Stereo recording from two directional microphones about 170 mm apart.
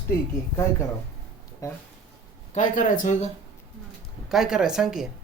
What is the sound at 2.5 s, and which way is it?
Speech, 45° left (ahead or behind).